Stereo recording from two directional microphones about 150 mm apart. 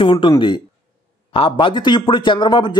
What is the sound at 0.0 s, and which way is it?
Speech, 35° left (ahead or behind).